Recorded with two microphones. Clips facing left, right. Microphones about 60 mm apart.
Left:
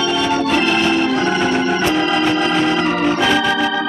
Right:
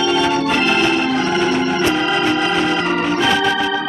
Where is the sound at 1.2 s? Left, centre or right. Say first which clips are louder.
Even; centre.